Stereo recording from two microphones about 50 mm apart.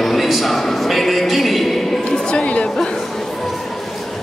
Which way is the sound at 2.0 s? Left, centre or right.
Centre.